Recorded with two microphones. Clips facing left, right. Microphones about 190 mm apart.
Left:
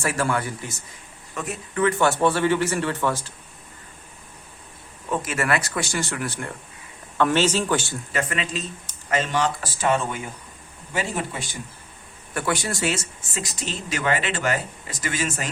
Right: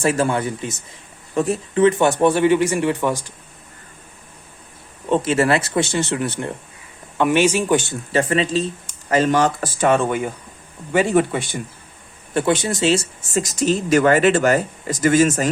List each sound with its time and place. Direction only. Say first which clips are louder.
0.0 s speech: right 6 dB; 25° right (ahead or behind)
1.3 s speech: right 11 dB; 30° right (ahead or behind); by 3.3 s 15° right (ahead or behind)
5.0 s speech: right 8 dB; 25° right (ahead or behind)
8.1 s speech: right 9 dB; 30° right (ahead or behind); by 11.4 s 60° right (ahead or behind)
12.3 s speech: right 7 dB; 25° right (ahead or behind)
13.3 s speech: right 12 dB; 45° right (ahead or behind)